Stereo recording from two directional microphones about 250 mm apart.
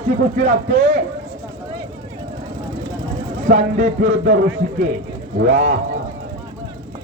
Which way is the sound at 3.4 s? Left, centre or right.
Right.